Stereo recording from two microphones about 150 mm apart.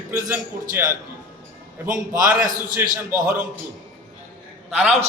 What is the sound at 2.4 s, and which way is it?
Speech, 65° right (ahead or behind).